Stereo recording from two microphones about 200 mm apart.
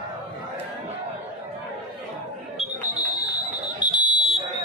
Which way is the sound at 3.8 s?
20° left (ahead or behind).